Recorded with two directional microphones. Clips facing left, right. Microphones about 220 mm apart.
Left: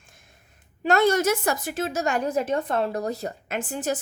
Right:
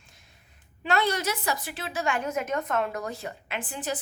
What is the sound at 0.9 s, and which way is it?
A woman's voice, 45° left (ahead or behind).